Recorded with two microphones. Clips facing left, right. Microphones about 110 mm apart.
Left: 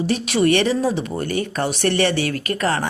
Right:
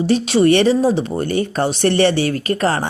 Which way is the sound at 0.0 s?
30° right (ahead or behind).